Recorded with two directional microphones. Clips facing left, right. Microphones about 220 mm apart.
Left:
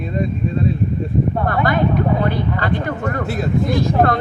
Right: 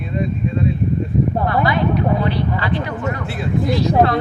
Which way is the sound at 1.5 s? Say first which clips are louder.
Even; 50° left (ahead or behind).